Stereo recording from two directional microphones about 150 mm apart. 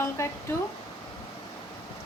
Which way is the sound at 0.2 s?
20° left (ahead or behind).